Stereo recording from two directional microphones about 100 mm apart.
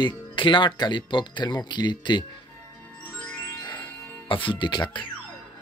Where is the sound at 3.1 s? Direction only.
10° left (ahead or behind).